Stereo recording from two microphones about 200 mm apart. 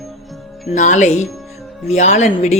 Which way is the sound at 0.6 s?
40° left (ahead or behind).